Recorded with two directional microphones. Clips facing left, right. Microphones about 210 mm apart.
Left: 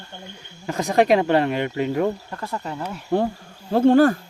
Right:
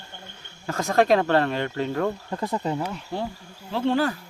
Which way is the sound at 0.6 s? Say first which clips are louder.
Left 2 dB; 15° left (ahead or behind).